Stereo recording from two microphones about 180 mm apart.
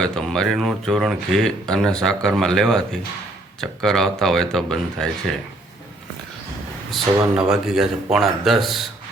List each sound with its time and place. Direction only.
0.0 s speech: 5° left (ahead or behind)
6.9 s speech: 5° right (ahead or behind)